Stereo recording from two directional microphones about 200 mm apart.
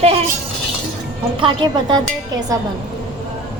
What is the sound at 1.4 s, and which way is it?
Speech, 25° right (ahead or behind).